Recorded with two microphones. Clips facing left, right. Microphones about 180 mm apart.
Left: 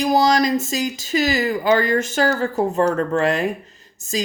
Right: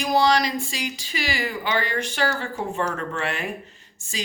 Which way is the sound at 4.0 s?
40° left (ahead or behind).